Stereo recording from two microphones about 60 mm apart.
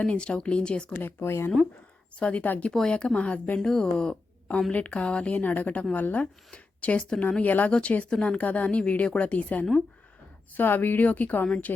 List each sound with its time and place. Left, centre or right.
0.0 s speech: centre
1.0 s speech: left
2.1 s speech: left
2.7 s speech: centre
3.6 s speech: centre
8.4 s speech: left